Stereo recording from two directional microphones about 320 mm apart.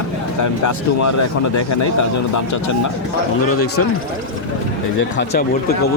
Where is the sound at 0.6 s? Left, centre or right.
Left.